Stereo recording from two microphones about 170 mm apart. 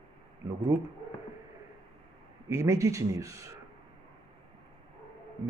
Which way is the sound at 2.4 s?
15° right (ahead or behind).